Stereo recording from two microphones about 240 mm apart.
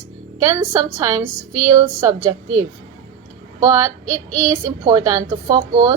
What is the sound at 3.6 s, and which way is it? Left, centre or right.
A woman's voice, centre.